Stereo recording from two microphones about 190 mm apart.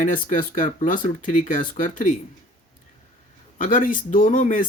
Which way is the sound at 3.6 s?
45° left (ahead or behind).